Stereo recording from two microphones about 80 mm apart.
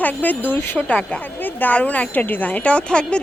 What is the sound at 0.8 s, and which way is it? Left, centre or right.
A woman's voice, centre.